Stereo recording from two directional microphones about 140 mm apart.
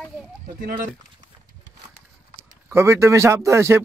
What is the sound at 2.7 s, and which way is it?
Speech, 20° right (ahead or behind).